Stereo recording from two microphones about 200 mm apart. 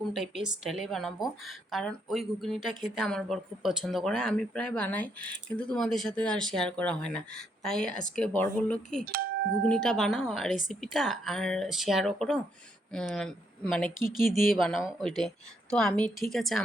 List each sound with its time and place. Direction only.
0.1 s speech: centre (ahead or behind)